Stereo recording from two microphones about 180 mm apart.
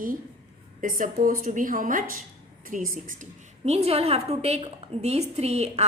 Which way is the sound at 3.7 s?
35° right (ahead or behind).